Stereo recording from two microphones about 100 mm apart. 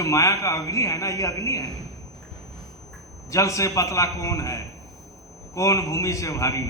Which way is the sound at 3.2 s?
30° left (ahead or behind).